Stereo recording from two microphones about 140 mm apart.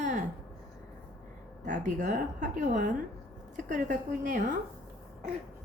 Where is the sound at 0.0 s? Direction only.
65° right (ahead or behind).